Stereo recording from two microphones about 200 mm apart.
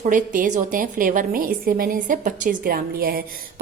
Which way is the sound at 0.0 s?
40° right (ahead or behind).